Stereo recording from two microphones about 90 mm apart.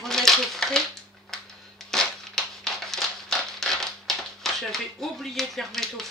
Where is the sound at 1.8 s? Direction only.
5° left (ahead or behind).